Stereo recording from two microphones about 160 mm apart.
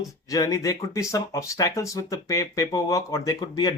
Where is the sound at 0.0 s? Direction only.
20° left (ahead or behind).